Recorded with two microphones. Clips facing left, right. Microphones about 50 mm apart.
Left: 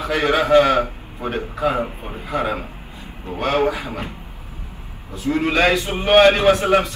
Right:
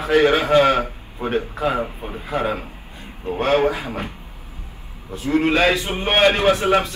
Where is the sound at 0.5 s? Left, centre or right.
Right.